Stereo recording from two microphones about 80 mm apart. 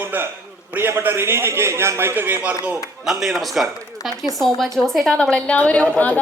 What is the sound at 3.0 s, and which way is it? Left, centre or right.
A woman's voice, centre.